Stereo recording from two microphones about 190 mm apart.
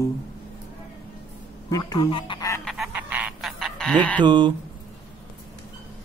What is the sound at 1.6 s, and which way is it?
Speech, 20° left (ahead or behind).